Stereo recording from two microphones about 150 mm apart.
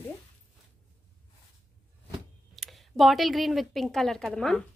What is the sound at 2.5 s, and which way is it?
A woman's voice, centre (ahead or behind).